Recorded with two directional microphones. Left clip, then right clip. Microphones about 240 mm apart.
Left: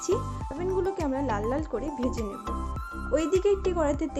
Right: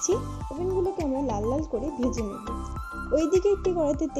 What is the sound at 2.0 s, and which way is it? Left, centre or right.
Speech, centre.